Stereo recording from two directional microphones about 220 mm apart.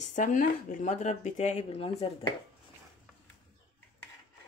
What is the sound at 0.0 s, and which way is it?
Speech, 35° left (ahead or behind).